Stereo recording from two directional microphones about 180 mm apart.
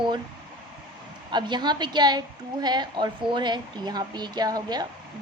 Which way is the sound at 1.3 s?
25° right (ahead or behind).